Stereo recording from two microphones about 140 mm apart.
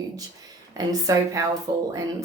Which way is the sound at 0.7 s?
25° right (ahead or behind).